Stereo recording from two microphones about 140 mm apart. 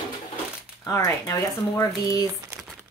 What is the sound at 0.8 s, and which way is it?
Speech, 20° left (ahead or behind).